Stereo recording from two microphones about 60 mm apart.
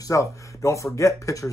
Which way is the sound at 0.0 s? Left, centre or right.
Left.